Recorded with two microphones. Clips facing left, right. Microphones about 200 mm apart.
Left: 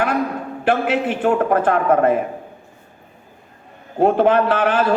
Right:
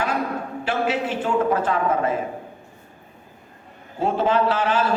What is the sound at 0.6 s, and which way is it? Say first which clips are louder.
A man's voice: left 6 dB; 55° left (ahead or behind).